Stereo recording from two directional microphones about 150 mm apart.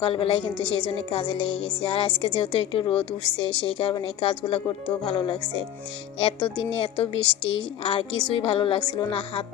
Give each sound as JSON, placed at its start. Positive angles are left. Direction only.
{"t": 0.0, "sound": "a woman's voice", "side_deg": 35}